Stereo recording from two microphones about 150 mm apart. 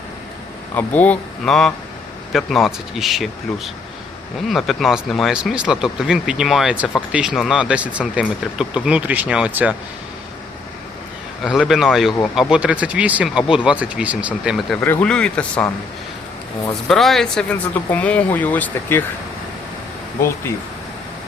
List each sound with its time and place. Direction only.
0.8 s speech: 10° left (ahead or behind); by 9.7 s 10° right (ahead or behind)
11.7 s speech: centre (ahead or behind)
14.8 s speech: 10° left (ahead or behind)
16.9 s speech: centre (ahead or behind)